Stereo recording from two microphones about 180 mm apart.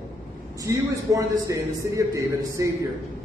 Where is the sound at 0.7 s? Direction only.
20° right (ahead or behind).